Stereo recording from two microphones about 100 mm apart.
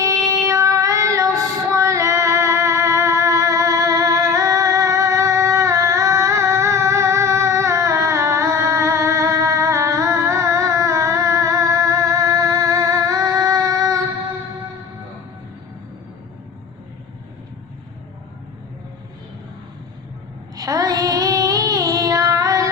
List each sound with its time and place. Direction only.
0.3 s child singing: 30° right (ahead or behind)
1.4 s music: 30° right (ahead or behind)
20.6 s female singing: 35° right (ahead or behind)